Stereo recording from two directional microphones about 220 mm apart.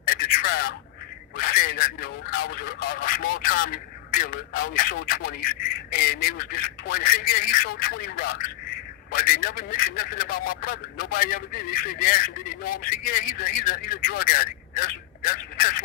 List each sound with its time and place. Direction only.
0.1 s radio: 40° left (ahead or behind)
1.4 s speech: 40° left (ahead or behind)